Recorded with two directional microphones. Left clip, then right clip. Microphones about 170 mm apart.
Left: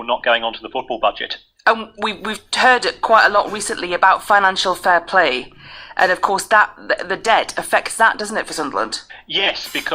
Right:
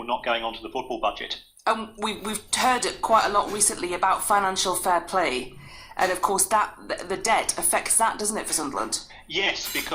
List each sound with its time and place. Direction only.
0.0 s speech: 25° left (ahead or behind)